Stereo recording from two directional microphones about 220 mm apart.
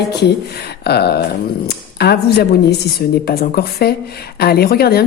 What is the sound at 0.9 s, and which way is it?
A woman's voice, 50° left (ahead or behind).